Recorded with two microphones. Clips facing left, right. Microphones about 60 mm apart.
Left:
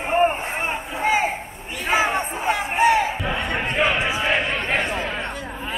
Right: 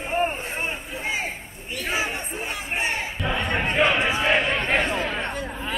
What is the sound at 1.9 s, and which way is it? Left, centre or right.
Crowd, left.